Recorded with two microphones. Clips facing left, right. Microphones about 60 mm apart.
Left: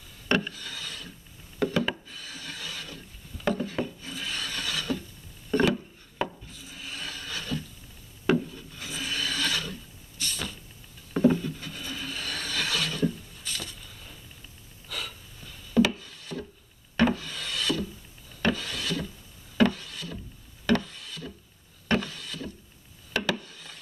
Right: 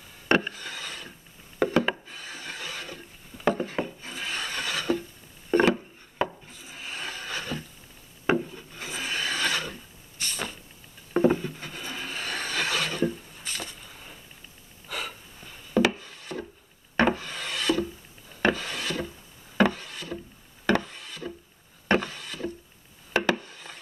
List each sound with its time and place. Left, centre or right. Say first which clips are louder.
0.3 s rub: right 3 dB; right
2.0 s wood: right 2 dB; right
6.5 s a sound: right 2 dB; right
8.3 s wood: even; right
10.2 s vehicle: right 1 dB; right
11.1 s a sound: right 1 dB; right
14.9 s wood: right 3 dB; right
18.3 s rub: right 3 dB; right
20.6 s wood: right 1 dB; right
23.3 s a sound: right 2 dB; right